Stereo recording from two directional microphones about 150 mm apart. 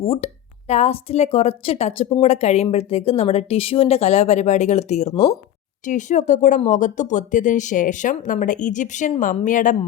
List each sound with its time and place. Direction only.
0.0 s a woman's voice: 40° left (ahead or behind)
5.8 s speech: 55° left (ahead or behind)